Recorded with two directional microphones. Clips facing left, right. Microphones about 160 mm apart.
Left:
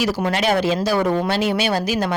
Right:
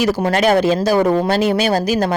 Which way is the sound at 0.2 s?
45° right (ahead or behind).